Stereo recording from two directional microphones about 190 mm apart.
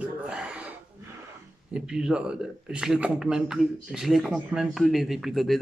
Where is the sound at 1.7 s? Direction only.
5° right (ahead or behind).